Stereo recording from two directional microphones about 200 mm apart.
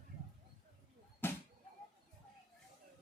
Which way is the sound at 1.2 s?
10° left (ahead or behind).